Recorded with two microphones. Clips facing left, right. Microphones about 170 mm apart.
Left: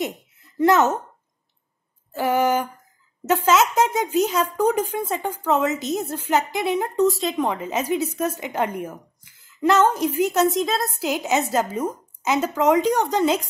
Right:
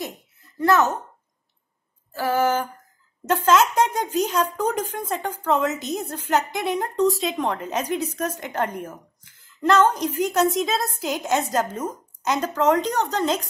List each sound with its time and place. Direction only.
0.6 s speech: 20° left (ahead or behind)
2.1 s a woman's voice: 20° left (ahead or behind)